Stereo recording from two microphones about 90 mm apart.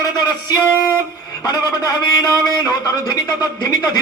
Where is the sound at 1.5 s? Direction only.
50° left (ahead or behind).